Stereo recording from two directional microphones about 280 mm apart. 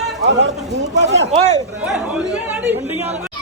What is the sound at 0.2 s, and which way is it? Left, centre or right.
Speech, right.